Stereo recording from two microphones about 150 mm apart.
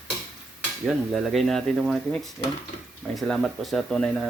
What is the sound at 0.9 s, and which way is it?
Speech, centre (ahead or behind).